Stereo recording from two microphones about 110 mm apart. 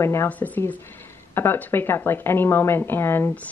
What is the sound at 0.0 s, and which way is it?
A woman's voice, 25° left (ahead or behind).